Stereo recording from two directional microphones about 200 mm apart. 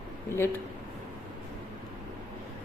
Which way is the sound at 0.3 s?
10° left (ahead or behind).